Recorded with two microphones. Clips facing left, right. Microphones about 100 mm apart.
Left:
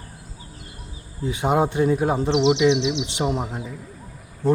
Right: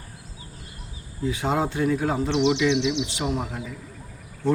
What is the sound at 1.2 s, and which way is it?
Speech, 20° left (ahead or behind).